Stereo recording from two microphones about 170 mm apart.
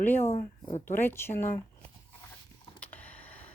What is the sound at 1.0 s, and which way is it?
Speech, 15° left (ahead or behind).